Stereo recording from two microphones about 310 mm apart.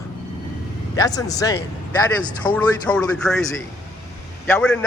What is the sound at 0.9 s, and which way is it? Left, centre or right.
A man's voice, centre.